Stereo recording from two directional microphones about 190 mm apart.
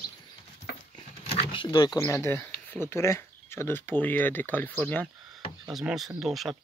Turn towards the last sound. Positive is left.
turn(degrees=0)  # may be behind; listen again after turning